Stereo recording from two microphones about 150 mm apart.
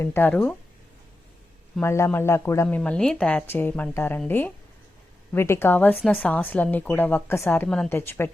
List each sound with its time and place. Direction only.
0.0 s a woman's voice: 15° left (ahead or behind)
1.8 s a woman's voice: 15° left (ahead or behind)